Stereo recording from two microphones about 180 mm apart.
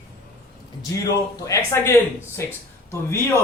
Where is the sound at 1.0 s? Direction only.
20° left (ahead or behind).